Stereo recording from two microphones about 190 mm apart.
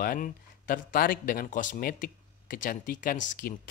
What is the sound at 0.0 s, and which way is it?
Speech, 45° left (ahead or behind).